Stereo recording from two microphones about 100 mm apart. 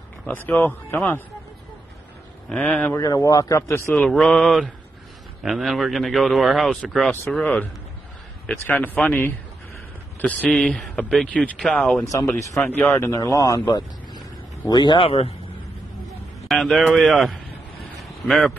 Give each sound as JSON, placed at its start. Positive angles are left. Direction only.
{"t": 0.3, "sound": "a man's voice", "side_deg": 20}
{"t": 2.5, "sound": "speech", "side_deg": 10}
{"t": 3.0, "sound": "a man's voice", "side_deg": 35}
{"t": 4.1, "sound": "speech", "side_deg": 5}
{"t": 8.6, "sound": "a man's voice", "side_deg": 20}
{"t": 10.5, "sound": "speech", "side_deg": 5}
{"t": 12.9, "sound": "a man's voice", "side_deg": 30}
{"t": 13.7, "sound": "vehicle", "side_deg": 50}
{"t": 14.7, "sound": "speech", "side_deg": 50}
{"t": 15.0, "sound": "a man's voice", "side_deg": 75}
{"t": 16.4, "sound": "speech", "side_deg": 0}